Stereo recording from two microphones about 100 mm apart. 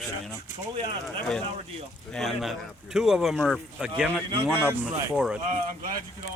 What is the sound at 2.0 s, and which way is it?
Speech, 5° left (ahead or behind).